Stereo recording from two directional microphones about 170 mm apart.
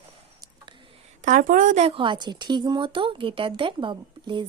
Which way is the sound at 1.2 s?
50° right (ahead or behind).